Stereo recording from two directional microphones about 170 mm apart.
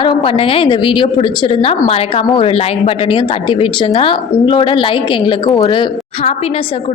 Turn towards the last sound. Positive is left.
turn(degrees=25)  # may be behind; listen again after turning